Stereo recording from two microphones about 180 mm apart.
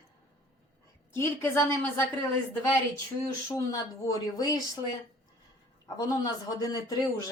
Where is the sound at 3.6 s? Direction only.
20° left (ahead or behind).